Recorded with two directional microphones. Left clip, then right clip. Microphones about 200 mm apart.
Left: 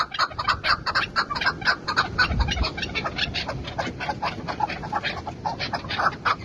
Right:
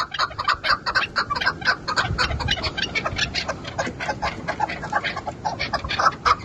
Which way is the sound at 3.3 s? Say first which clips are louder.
Right 3 dB; 55° right (ahead or behind).